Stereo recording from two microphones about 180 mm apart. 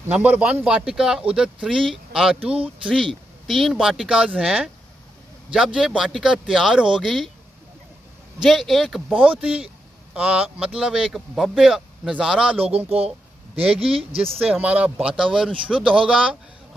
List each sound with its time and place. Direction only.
0.0 s speech: 10° right (ahead or behind)
8.4 s speech: centre (ahead or behind)
12.5 s speech: 35° right (ahead or behind)
14.4 s speech: 5° right (ahead or behind)